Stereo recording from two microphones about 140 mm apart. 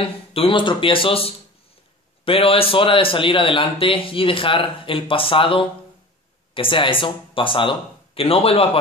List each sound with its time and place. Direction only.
0.0 s speech: 40° left (ahead or behind)